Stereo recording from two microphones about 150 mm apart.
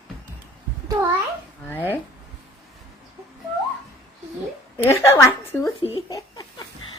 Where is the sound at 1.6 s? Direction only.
10° left (ahead or behind).